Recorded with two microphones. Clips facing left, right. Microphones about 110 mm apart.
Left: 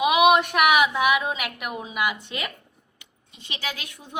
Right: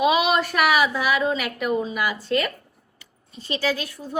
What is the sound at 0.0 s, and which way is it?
A woman's voice, 15° left (ahead or behind).